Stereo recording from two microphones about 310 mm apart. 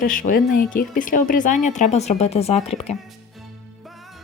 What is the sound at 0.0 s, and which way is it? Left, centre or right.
Speech, left.